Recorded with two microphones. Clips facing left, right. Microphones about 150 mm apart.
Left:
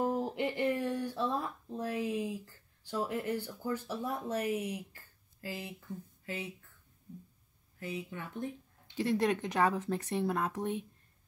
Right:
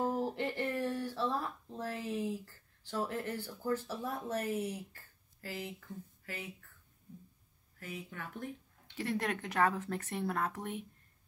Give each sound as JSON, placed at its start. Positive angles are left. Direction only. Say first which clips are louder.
{"t": 0.0, "sound": "speech", "louder": "left 2 dB", "side_deg": 15}
{"t": 7.8, "sound": "speech", "louder": "left 4 dB", "side_deg": 20}